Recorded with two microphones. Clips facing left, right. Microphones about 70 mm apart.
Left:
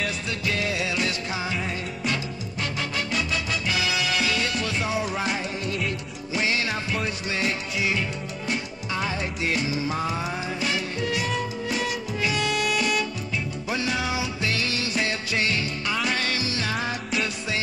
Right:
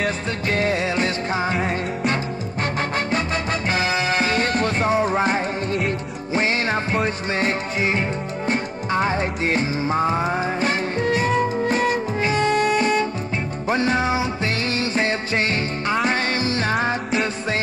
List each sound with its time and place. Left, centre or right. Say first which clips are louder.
0.0 s music: right 5 dB; right
3.1 s music: right 5 dB; right